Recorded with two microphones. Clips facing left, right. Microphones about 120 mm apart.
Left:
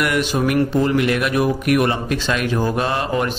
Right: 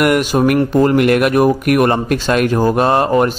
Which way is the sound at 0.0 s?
50° right (ahead or behind).